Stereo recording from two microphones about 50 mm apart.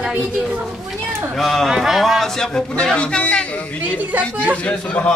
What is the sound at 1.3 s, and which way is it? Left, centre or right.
A man's voice, centre.